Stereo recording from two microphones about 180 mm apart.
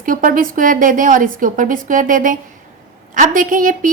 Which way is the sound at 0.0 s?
50° right (ahead or behind).